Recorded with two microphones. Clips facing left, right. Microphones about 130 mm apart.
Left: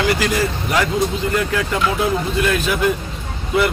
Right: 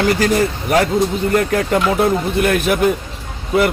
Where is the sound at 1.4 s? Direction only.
50° right (ahead or behind).